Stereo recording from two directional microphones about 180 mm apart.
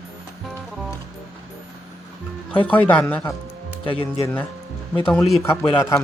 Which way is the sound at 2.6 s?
10° left (ahead or behind).